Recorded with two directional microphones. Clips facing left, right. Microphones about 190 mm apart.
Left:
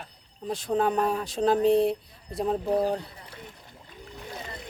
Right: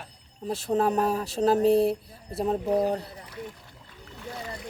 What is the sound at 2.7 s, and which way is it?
Speech, 30° left (ahead or behind).